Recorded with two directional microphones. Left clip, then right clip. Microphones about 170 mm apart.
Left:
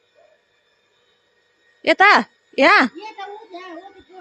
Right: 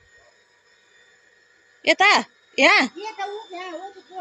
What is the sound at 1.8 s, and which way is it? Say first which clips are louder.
A woman's voice: left 4 dB; 40° left (ahead or behind).